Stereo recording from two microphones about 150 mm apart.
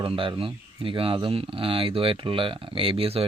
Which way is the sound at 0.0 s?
35° right (ahead or behind).